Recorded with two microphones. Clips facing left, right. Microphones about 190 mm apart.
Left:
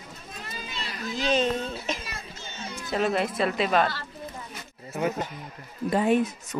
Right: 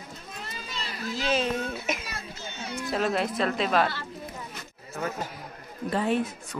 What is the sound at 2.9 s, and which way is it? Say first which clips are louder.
Speech: left 2 dB; centre (ahead or behind).